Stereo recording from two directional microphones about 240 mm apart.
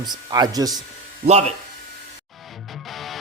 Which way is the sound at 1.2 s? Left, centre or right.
Right.